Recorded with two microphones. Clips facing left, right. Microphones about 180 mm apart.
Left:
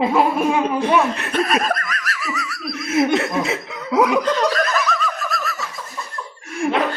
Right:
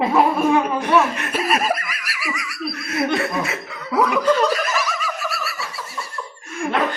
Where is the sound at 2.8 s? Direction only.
20° left (ahead or behind).